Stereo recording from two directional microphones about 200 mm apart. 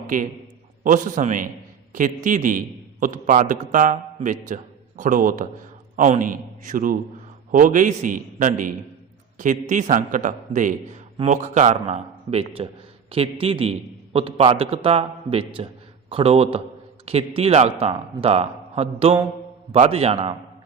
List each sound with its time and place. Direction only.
0.9 s a man's voice: 40° right (ahead or behind)